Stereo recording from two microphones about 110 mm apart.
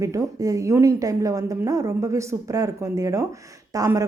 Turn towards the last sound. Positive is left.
turn(degrees=-30)  # may be behind; listen again after turning